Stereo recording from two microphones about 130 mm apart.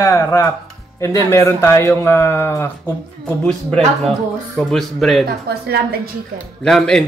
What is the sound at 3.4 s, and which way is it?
Speech, 5° left (ahead or behind).